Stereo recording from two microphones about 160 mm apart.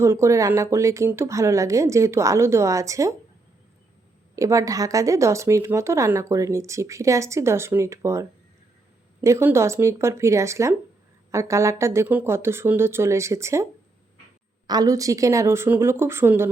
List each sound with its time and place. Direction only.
0.0 s speech: 20° right (ahead or behind)
4.4 s speech: 20° right (ahead or behind)
14.7 s speech: 20° right (ahead or behind)